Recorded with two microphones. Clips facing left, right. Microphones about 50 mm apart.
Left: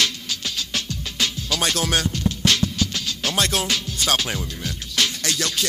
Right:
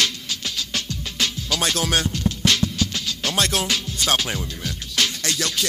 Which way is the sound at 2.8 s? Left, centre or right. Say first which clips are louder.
Even; right.